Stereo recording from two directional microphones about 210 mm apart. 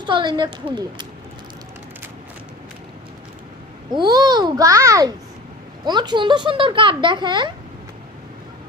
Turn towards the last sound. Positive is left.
turn(degrees=-20)  # may be behind; listen again after turning